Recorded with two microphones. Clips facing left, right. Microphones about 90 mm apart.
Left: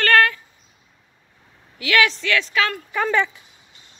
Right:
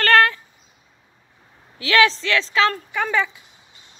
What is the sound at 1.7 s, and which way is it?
A woman's voice, 30° right (ahead or behind).